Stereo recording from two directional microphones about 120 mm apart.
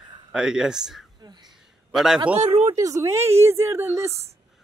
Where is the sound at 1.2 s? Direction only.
35° right (ahead or behind).